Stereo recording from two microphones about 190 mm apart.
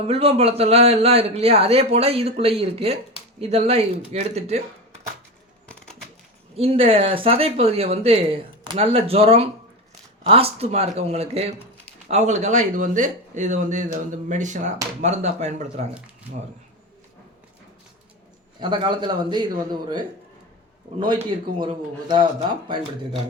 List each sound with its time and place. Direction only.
0.0 s a man's voice: 30° right (ahead or behind)
5.6 s a sound: 5° left (ahead or behind)
6.6 s a man's voice: 30° right (ahead or behind)
18.6 s a man's voice: 25° right (ahead or behind)
21.0 s a man's voice: 25° right (ahead or behind)